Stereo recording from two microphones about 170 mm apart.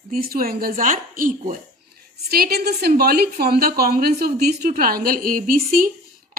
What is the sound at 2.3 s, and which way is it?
A woman's voice, 65° right (ahead or behind).